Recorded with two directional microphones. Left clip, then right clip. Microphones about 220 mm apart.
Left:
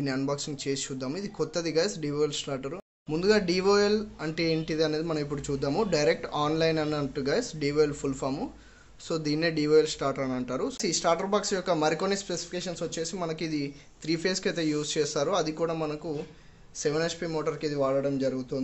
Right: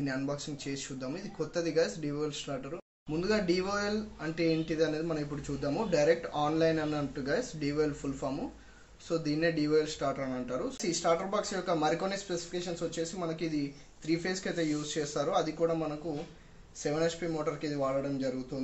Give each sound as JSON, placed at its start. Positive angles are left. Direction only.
{"t": 0.0, "sound": "speech", "side_deg": 50}
{"t": 16.8, "sound": "speech", "side_deg": 50}